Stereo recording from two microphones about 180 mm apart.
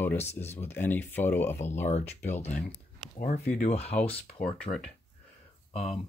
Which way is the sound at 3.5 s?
35° left (ahead or behind).